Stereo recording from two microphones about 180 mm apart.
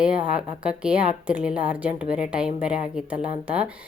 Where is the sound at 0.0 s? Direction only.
5° right (ahead or behind).